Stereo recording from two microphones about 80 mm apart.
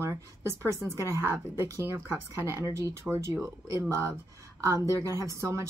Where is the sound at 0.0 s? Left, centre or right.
Right.